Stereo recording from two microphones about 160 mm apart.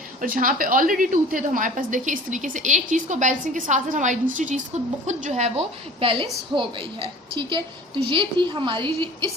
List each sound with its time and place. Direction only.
0.2 s a woman's voice: 55° right (ahead or behind); by 9.3 s 30° right (ahead or behind)